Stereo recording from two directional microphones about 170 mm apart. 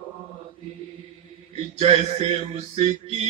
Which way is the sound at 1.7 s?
40° right (ahead or behind).